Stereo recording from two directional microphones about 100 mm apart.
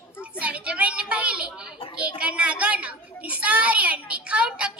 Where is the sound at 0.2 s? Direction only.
15° right (ahead or behind).